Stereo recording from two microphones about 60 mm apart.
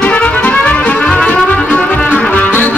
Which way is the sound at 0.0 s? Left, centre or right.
Left.